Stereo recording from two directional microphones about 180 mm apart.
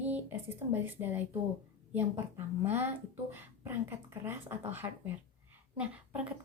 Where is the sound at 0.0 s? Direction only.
10° right (ahead or behind).